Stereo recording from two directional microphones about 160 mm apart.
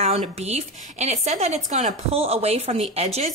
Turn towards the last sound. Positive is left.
turn(degrees=-40)  # may be behind; listen again after turning